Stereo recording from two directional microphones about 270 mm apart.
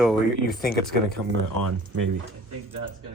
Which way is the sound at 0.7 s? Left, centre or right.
Left.